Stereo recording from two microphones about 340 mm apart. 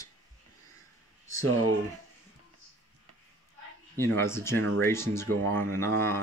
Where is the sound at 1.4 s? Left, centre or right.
Right.